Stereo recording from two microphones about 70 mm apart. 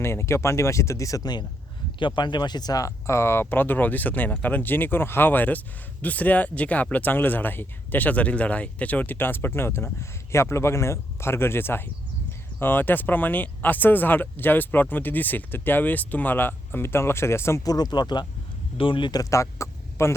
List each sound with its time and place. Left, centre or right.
0.0 s speech: left
1.2 s speech: left
3.1 s speech: left
3.4 s speech: left
17.6 s speech: left
19.0 s speech: left
19.3 s speech: left